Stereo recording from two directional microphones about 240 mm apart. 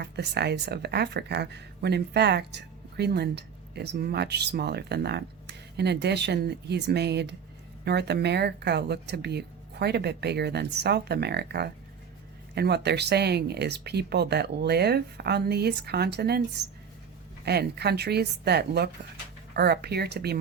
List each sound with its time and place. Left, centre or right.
0.0 s speech: right